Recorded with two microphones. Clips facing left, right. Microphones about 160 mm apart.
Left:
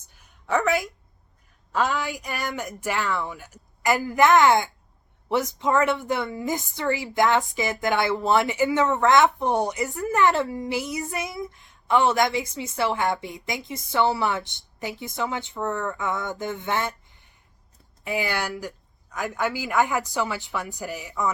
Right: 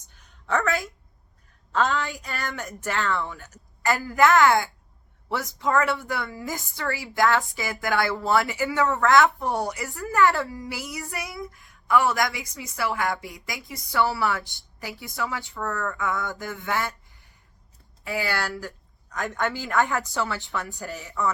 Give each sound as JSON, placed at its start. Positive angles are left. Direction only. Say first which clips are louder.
{"t": 0.2, "sound": "a sound", "louder": "left 2 dB", "side_deg": 15}
{"t": 1.7, "sound": "a woman's voice", "louder": "even", "side_deg": 15}
{"t": 19.1, "sound": "a man's voice", "louder": "left 1 dB", "side_deg": 5}